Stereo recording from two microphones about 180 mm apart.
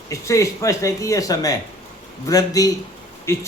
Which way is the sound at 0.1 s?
15° left (ahead or behind).